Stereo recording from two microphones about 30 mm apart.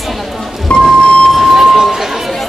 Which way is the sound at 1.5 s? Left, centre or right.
Centre.